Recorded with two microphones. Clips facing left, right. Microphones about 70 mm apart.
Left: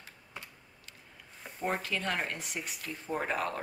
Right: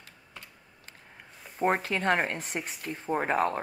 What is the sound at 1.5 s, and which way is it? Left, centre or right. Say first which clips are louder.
Speech: right 7 dB; right.